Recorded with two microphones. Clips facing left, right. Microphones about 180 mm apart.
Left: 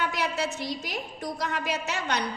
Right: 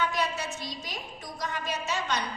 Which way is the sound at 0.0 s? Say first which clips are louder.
Left 1 dB; 65° left (ahead or behind).